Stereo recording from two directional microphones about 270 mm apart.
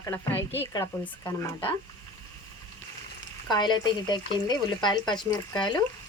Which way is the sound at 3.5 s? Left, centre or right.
Centre.